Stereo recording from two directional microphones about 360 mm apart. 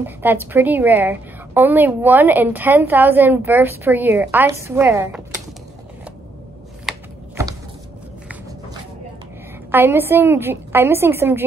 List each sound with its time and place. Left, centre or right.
0.0 s a woman's voice: centre
6.9 s typing: centre
9.7 s a woman's voice: centre